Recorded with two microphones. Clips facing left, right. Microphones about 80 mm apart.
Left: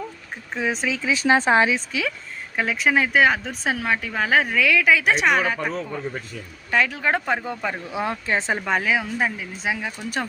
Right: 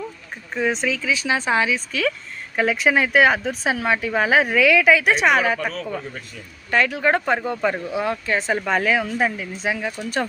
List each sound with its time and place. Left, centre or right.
0.5 s speech: centre
0.9 s speech: left
1.9 s speech: centre
2.6 s a woman's voice: centre
6.7 s a woman's voice: centre
7.9 s speech: left; by 10.2 s centre